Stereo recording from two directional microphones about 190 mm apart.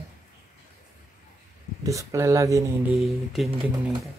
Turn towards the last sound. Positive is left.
turn(degrees=0)  # may be behind; listen again after turning